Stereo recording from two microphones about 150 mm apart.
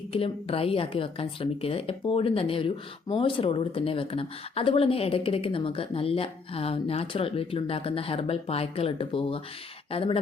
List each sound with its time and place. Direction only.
0.1 s speech: 40° left (ahead or behind)